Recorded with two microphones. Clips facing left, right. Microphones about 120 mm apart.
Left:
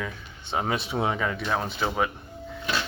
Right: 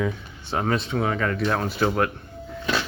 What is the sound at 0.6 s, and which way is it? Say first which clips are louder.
Speech: right 3 dB; 5° left (ahead or behind).